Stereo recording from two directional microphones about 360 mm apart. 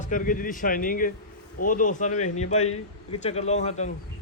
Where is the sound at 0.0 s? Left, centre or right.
Left.